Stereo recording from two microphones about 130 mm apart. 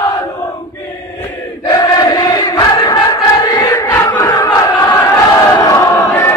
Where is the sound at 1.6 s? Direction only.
30° left (ahead or behind).